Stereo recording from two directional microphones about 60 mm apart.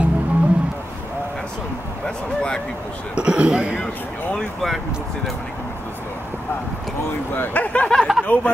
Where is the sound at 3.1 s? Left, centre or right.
Centre.